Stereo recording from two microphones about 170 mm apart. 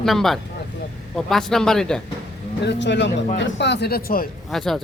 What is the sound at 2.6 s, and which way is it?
Speech, 90° left.